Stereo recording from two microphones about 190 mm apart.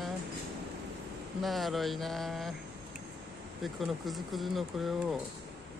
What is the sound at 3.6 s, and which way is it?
Speech, centre (ahead or behind).